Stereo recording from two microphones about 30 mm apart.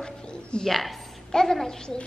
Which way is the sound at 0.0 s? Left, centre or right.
Left.